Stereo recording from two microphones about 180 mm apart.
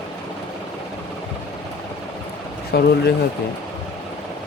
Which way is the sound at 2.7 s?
65° left (ahead or behind).